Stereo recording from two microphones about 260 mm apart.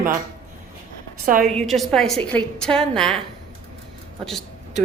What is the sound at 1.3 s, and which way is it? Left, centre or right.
Speech, right.